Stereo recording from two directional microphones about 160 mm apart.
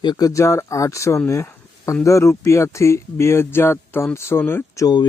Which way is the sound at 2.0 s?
15° left (ahead or behind).